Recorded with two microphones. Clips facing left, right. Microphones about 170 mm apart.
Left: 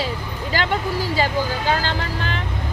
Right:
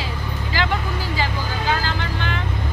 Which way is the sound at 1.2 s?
35° left (ahead or behind).